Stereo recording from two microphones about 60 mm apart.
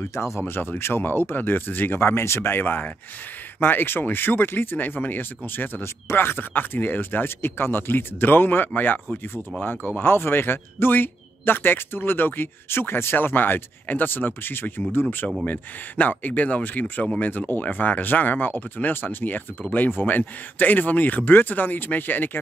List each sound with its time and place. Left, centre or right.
0.1 s speech: left
0.5 s speech: left